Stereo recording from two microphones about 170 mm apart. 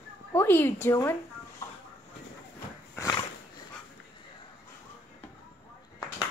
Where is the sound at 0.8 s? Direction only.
15° left (ahead or behind).